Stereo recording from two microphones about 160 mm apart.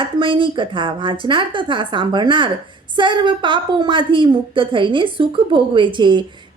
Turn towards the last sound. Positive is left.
turn(degrees=-30)  # may be behind; listen again after turning